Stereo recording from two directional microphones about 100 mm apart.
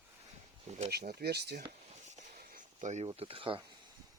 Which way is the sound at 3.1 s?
65° right (ahead or behind).